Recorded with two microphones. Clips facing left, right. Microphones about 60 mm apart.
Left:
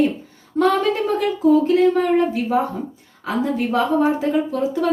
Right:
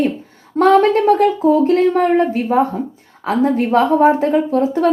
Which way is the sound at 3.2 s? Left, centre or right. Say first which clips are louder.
Right 6 dB; right.